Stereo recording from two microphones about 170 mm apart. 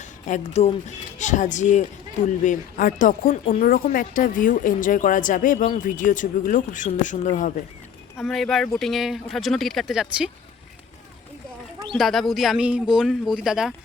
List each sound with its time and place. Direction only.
0.0 s speech: 45° left (ahead or behind)
8.2 s speech: centre (ahead or behind)
11.9 s speech: centre (ahead or behind)